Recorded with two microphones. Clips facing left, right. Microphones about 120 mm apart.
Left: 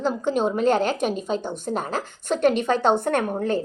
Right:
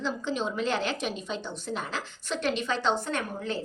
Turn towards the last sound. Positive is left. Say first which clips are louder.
# left 9 dB
turn(degrees=50)  # may be behind; listen again after turning